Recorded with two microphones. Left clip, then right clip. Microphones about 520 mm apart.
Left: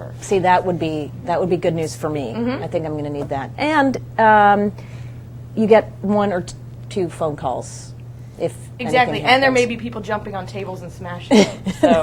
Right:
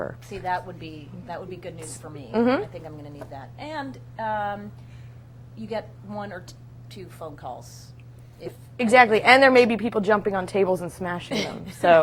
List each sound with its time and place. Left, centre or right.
0.2 s a woman's voice: left
2.3 s a woman's voice: right
2.7 s a woman's voice: left
8.8 s a woman's voice: right
11.3 s a woman's voice: left